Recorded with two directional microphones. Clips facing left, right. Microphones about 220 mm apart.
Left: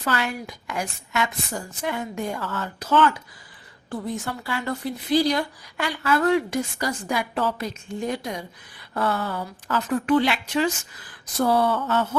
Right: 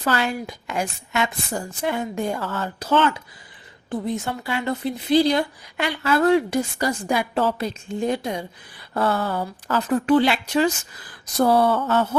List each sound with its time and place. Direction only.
0.0 s a woman's voice: 30° right (ahead or behind)
9.2 s a woman's voice: 50° right (ahead or behind)
9.7 s speech: 30° right (ahead or behind)